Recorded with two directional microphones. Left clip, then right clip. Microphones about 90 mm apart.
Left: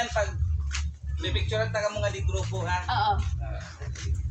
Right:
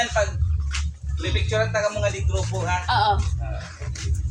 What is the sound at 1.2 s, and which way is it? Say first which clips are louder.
A man's voice: right 5 dB; 5° right (ahead or behind).